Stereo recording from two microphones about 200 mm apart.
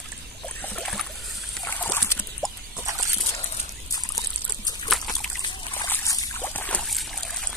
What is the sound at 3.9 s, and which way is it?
Trickle, 20° left (ahead or behind).